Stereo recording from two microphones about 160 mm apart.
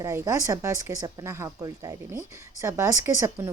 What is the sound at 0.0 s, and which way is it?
A woman's voice, 20° right (ahead or behind).